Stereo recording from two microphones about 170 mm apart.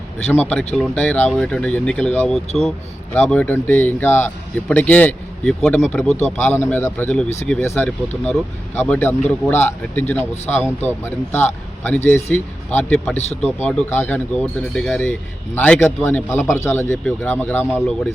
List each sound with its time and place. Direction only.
0.3 s speech: 10° left (ahead or behind)
6.1 s speech: 40° left (ahead or behind)
6.4 s speech: 15° left (ahead or behind)
13.1 s speech: 40° left (ahead or behind)
13.6 s speech: 10° left (ahead or behind)